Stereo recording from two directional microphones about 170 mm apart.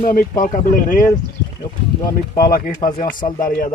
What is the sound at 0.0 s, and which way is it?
Speech, 55° left (ahead or behind).